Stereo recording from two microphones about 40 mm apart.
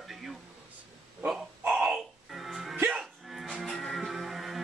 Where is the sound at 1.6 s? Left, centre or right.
Right.